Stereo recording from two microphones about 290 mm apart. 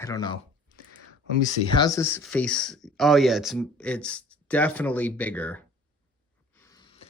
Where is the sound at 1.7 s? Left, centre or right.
Centre.